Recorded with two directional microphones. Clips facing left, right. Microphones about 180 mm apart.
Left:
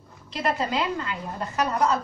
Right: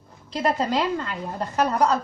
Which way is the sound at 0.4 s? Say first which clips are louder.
Right 3 dB; 35° right (ahead or behind).